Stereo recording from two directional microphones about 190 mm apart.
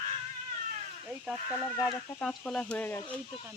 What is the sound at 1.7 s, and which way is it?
Speech, 10° left (ahead or behind).